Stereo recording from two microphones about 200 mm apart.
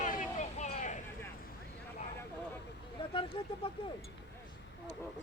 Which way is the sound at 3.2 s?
25° left (ahead or behind).